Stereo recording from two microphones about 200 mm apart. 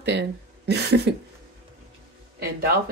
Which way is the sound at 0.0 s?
60° right (ahead or behind).